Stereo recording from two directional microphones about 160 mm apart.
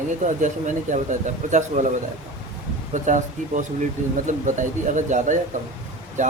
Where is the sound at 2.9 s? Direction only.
50° right (ahead or behind).